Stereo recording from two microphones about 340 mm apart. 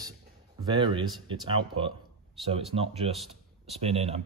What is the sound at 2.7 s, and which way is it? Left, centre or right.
Speech, centre.